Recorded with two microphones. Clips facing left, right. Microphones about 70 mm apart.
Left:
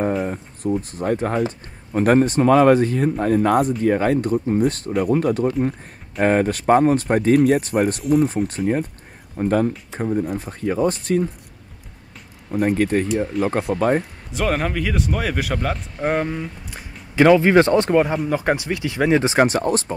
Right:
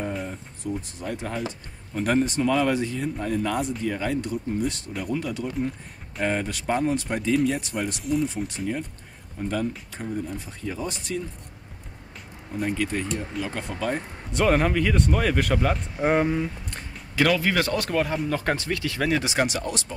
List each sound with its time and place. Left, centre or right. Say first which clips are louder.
0.3 s speech: left 8 dB; left
12.5 s speech: left 8 dB; left
14.3 s speech: right 1 dB; centre
17.1 s speech: left 9 dB; left
18.1 s speech: left 5 dB; centre; by 20.0 s left